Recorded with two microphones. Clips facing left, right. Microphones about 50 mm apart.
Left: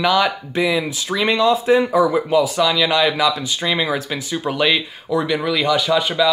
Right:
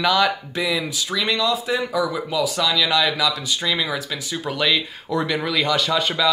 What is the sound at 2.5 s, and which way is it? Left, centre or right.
Speech, centre.